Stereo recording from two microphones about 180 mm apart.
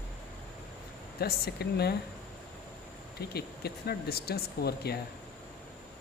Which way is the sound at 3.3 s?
60° left (ahead or behind).